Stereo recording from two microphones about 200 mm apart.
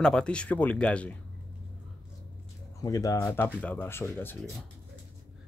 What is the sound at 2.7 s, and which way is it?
Speech, 20° left (ahead or behind).